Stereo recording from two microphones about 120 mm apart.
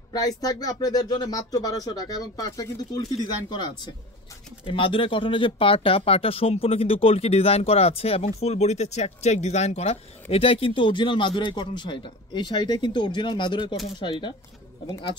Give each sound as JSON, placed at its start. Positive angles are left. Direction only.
{"t": 0.1, "sound": "speech", "side_deg": 30}
{"t": 10.3, "sound": "speech", "side_deg": 55}